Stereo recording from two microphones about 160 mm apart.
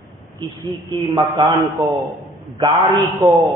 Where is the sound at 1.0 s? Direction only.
35° right (ahead or behind).